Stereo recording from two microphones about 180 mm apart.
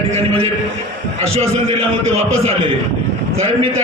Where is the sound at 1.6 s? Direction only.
30° right (ahead or behind).